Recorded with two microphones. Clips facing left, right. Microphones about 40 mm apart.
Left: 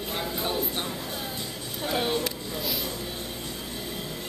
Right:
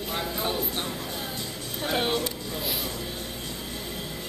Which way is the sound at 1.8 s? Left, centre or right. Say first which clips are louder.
Right 1 dB; right.